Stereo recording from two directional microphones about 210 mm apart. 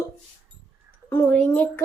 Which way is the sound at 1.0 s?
10° left (ahead or behind).